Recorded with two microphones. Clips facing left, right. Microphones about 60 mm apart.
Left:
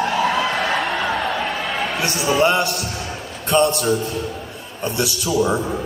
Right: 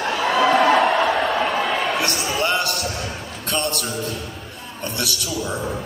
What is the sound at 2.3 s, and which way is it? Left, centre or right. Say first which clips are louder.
Speech: left 6 dB; centre.